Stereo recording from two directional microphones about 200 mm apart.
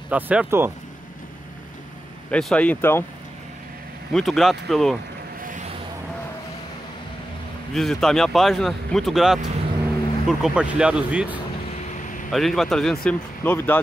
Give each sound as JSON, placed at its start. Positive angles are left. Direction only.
{"t": 0.1, "sound": "speech", "side_deg": -5}
{"t": 2.3, "sound": "speech", "side_deg": 5}
{"t": 4.1, "sound": "speech", "side_deg": 0}
{"t": 5.4, "sound": "a sound", "side_deg": -40}
{"t": 7.7, "sound": "speech", "side_deg": 0}
{"t": 11.9, "sound": "vehicle", "side_deg": 40}
{"t": 12.3, "sound": "speech", "side_deg": 0}